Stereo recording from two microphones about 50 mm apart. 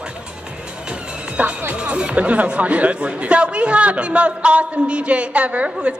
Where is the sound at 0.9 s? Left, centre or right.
Right.